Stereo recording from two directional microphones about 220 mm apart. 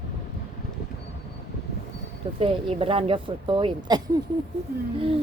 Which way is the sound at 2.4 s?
25° right (ahead or behind).